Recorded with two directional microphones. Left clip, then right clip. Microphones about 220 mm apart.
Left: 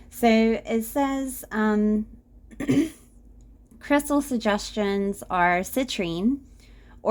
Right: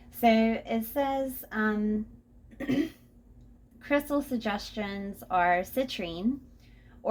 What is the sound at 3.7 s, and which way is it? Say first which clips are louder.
Speech: left 5 dB; 55° left (ahead or behind).